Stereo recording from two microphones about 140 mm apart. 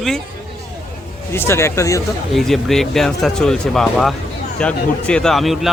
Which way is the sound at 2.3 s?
Centre (ahead or behind).